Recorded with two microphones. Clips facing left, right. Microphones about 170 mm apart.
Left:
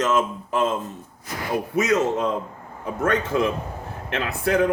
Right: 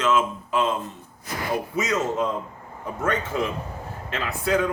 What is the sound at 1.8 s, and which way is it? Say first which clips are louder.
A man's voice: left 5 dB; 65° left (ahead or behind).